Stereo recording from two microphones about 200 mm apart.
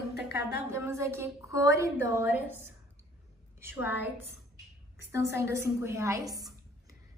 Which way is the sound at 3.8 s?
10° right (ahead or behind).